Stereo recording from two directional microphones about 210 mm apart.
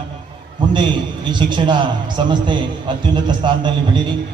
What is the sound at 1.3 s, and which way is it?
A man's voice, 20° right (ahead or behind).